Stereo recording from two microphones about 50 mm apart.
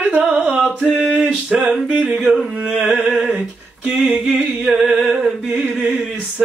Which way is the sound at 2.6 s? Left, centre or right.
Centre.